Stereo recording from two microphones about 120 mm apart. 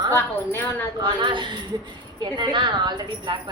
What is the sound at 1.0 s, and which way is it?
Speech, 40° right (ahead or behind).